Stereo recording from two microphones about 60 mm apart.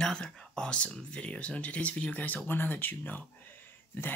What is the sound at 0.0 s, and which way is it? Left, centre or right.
Speech, centre.